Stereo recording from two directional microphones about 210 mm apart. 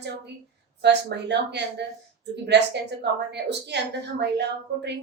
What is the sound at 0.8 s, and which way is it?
A woman's voice, 55° right (ahead or behind).